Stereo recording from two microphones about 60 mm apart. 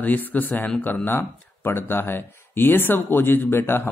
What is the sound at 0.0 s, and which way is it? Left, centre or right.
Speech, left.